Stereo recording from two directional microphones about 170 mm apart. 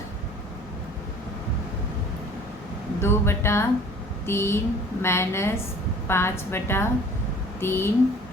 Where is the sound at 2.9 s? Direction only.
15° left (ahead or behind).